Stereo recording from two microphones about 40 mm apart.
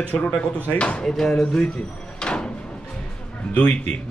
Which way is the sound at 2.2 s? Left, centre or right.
Left.